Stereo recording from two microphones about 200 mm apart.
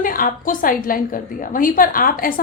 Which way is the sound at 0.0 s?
45° left (ahead or behind).